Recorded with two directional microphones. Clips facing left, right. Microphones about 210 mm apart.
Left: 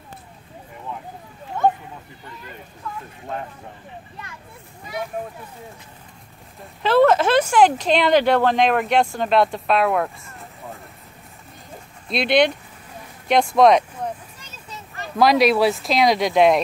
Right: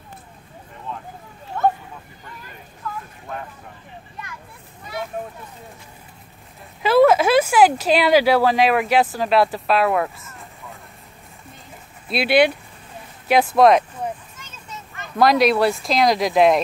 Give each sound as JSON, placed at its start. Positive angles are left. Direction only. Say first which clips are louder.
{"t": 6.8, "sound": "speech", "louder": "right 1 dB", "side_deg": -10}
{"t": 12.1, "sound": "speech", "louder": "right 1 dB", "side_deg": -5}
{"t": 14.3, "sound": "a sound", "louder": "right 1 dB", "side_deg": 35}
{"t": 15.1, "sound": "speech", "louder": "even", "side_deg": 0}